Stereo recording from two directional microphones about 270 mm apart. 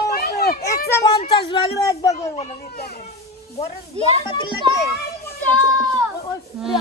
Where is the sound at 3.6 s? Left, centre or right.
Left.